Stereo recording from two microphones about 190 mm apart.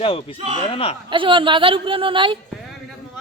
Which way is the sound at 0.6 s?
30° left (ahead or behind).